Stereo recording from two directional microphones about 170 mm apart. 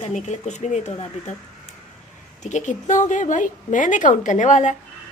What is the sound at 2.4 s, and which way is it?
A woman's voice, 45° left (ahead or behind).